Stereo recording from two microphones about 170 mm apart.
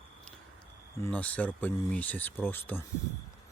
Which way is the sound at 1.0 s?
10° left (ahead or behind).